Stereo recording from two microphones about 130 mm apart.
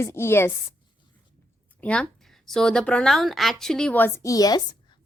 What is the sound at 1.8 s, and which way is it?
A woman's voice, 10° left (ahead or behind).